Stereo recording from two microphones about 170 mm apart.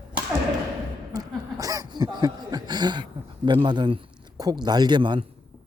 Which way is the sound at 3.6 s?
25° right (ahead or behind).